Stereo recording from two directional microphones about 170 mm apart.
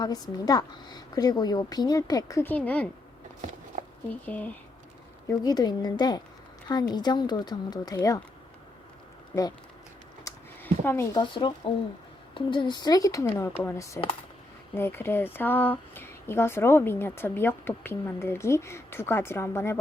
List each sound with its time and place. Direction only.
0.0 s a woman's voice: 20° left (ahead or behind)
3.7 s a sound: 50° right (ahead or behind)
4.1 s speech: 10° left (ahead or behind)
5.3 s a woman's voice: 20° left (ahead or behind)
10.2 s a sound: 15° left (ahead or behind)
11.2 s a woman's voice: 30° left (ahead or behind)